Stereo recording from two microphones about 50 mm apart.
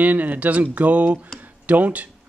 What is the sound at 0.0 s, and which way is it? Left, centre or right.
Speech, right.